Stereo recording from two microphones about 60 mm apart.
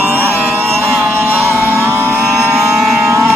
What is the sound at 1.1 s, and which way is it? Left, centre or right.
Music, right.